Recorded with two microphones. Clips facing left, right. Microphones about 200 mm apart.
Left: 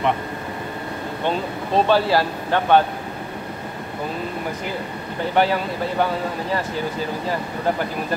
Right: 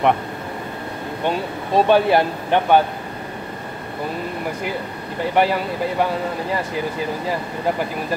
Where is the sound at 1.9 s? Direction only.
20° right (ahead or behind).